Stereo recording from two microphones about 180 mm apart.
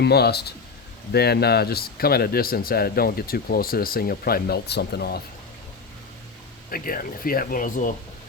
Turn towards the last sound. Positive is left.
turn(degrees=50)  # may be behind; listen again after turning